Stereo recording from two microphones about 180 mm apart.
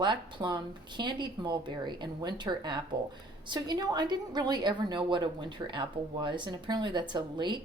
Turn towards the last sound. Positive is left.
turn(degrees=-25)  # may be behind; listen again after turning